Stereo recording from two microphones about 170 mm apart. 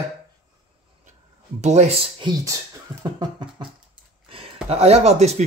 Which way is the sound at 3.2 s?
25° right (ahead or behind).